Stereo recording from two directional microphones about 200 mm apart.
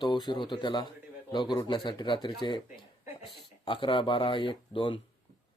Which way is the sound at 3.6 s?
25° left (ahead or behind).